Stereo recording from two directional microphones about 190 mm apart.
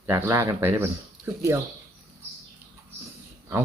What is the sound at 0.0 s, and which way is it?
Speech, 15° right (ahead or behind).